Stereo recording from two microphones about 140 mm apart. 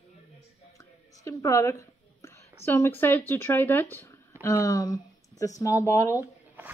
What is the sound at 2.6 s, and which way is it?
Speech, 15° left (ahead or behind).